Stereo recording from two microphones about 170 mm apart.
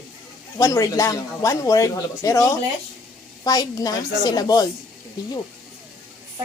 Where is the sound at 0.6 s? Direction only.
20° left (ahead or behind).